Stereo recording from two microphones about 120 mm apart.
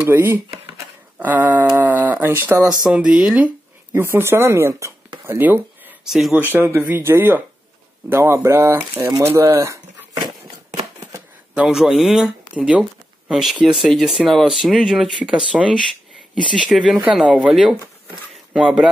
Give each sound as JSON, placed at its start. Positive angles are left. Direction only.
{"t": 0.0, "sound": "speech", "side_deg": -20}
{"t": 2.9, "sound": "speech", "side_deg": -10}
{"t": 5.2, "sound": "a sound", "side_deg": -15}
{"t": 6.0, "sound": "speech", "side_deg": -5}
{"t": 6.5, "sound": "speech", "side_deg": -15}
{"t": 10.7, "sound": "a sound", "side_deg": -30}
{"t": 11.5, "sound": "speech", "side_deg": -5}